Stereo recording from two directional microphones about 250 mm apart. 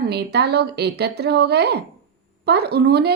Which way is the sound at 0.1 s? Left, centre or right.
Right.